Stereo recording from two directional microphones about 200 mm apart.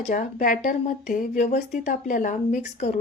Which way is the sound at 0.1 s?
40° left (ahead or behind).